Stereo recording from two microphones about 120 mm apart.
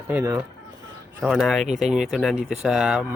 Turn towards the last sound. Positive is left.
turn(degrees=-5)  # may be behind; listen again after turning